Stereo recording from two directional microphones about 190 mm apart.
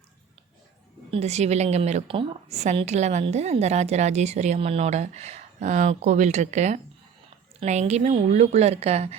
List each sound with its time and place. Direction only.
1.1 s a woman's voice: 35° right (ahead or behind)